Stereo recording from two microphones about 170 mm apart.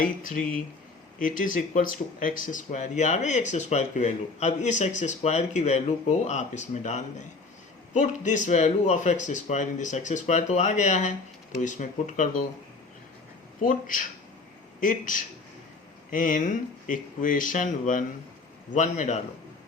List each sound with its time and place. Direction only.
0.0 s speech: 50° left (ahead or behind)
13.6 s speech: 50° left (ahead or behind)